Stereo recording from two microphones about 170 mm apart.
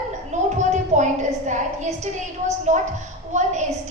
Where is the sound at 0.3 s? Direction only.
45° right (ahead or behind).